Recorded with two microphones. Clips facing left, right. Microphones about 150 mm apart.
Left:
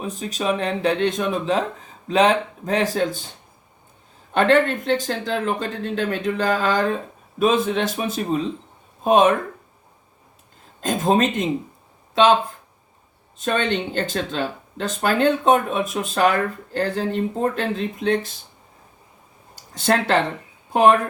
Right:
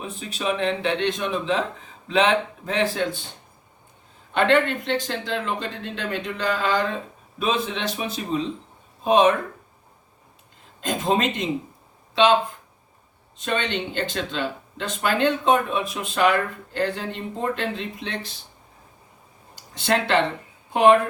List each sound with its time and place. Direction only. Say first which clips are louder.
0.0 s speech: left 3 dB; 40° left (ahead or behind)
4.4 s speech: left 3 dB; 45° left (ahead or behind)
10.8 s speech: left 4 dB; 45° left (ahead or behind)
13.4 s speech: left 4 dB; 45° left (ahead or behind)
19.7 s speech: left 2 dB; 45° left (ahead or behind)